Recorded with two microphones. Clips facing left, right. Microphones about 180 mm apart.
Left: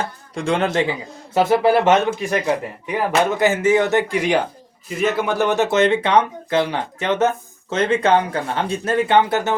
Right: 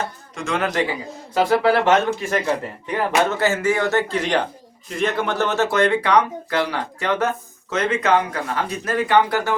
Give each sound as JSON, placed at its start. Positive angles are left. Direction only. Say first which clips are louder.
{"t": 0.0, "sound": "a man's voice", "louder": "left 4 dB", "side_deg": 30}